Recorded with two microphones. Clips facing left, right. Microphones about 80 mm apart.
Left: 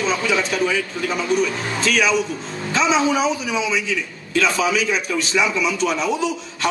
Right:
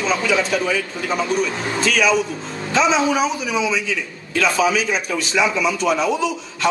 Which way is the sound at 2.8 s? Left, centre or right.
Right.